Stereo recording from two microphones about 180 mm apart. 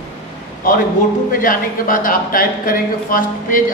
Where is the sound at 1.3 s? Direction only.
50° left (ahead or behind).